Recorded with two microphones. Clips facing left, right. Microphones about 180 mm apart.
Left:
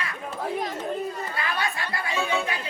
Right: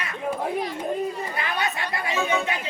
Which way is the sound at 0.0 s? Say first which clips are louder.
Right 6 dB; 20° right (ahead or behind).